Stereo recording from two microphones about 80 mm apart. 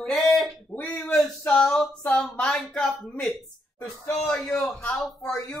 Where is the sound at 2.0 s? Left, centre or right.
Centre.